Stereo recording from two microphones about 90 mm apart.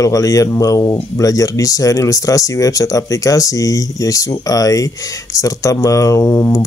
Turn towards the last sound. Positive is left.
turn(degrees=35)  # may be behind; listen again after turning